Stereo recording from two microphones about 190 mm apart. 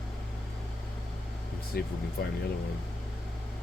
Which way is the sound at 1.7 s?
55° left (ahead or behind).